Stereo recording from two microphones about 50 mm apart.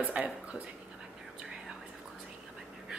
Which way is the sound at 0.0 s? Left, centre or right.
Right.